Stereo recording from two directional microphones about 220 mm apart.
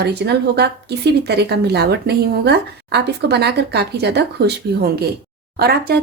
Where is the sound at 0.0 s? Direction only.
50° right (ahead or behind).